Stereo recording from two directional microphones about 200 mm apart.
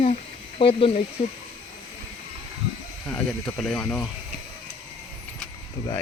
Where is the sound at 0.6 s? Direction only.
25° left (ahead or behind).